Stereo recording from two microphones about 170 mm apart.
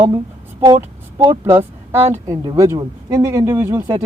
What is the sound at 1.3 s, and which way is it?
Speech, 15° right (ahead or behind).